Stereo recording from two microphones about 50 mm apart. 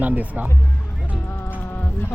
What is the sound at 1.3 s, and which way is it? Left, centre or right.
Music, left.